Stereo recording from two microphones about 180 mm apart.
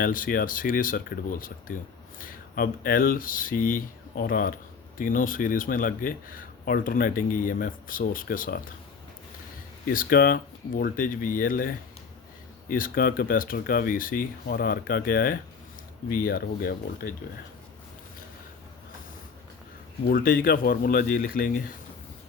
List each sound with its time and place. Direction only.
0.0 s speech: 50° left (ahead or behind)
9.8 s speech: 50° left (ahead or behind)
20.1 s speech: 55° left (ahead or behind)